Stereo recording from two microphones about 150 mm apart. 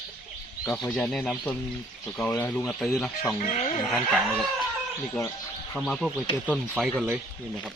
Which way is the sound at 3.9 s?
Centre (ahead or behind).